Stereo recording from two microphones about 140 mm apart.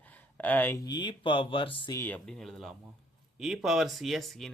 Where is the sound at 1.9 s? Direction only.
15° left (ahead or behind).